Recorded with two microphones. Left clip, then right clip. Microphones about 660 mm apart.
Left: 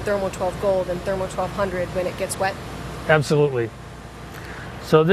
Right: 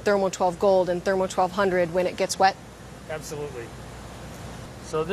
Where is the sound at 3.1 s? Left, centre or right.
Left.